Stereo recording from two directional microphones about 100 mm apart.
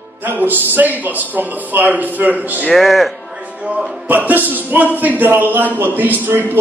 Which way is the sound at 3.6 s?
15° right (ahead or behind).